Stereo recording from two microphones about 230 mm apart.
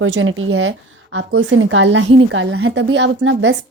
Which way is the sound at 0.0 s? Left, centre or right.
Right.